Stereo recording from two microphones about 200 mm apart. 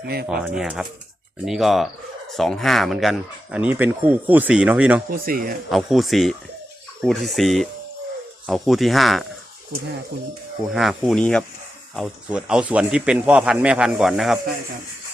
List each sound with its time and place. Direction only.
0.0 s speech: 55° right (ahead or behind)
0.3 s speech: 5° right (ahead or behind)
5.1 s speech: 45° right (ahead or behind)
5.7 s speech: centre (ahead or behind)
10.7 s speech: centre (ahead or behind)